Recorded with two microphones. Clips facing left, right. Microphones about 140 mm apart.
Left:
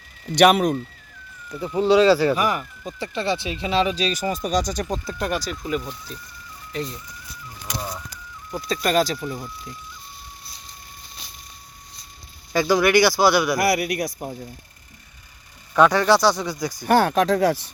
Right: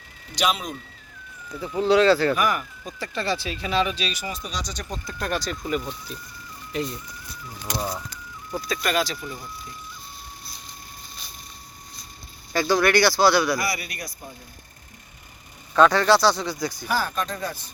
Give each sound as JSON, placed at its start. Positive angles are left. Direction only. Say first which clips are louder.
{"t": 0.3, "sound": "speech", "louder": "left 10 dB", "side_deg": 65}
{"t": 1.8, "sound": "speech", "louder": "left 2 dB", "side_deg": 5}
{"t": 2.3, "sound": "speech", "louder": "left 1 dB", "side_deg": 30}
{"t": 5.2, "sound": "speech", "louder": "right 2 dB", "side_deg": 10}
{"t": 7.8, "sound": "speech", "louder": "right 3 dB", "side_deg": -10}
{"t": 8.4, "sound": "speech", "louder": "even", "side_deg": 5}
{"t": 8.7, "sound": "speech", "louder": "left 5 dB", "side_deg": 35}
{"t": 12.5, "sound": "speech", "louder": "left 3 dB", "side_deg": 15}
{"t": 13.6, "sound": "a man's voice", "louder": "left 9 dB", "side_deg": 70}
{"t": 15.7, "sound": "speech", "louder": "left 1 dB", "side_deg": 15}
{"t": 16.7, "sound": "speech", "louder": "left 13 dB", "side_deg": 50}
{"t": 17.0, "sound": "speech", "louder": "left 10 dB", "side_deg": 85}